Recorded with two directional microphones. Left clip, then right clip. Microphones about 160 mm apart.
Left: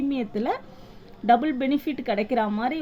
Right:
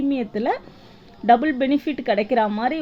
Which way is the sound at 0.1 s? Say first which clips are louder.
Right 4 dB; 30° right (ahead or behind).